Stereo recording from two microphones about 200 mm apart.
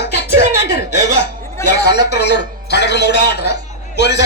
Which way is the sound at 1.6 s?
15° left (ahead or behind).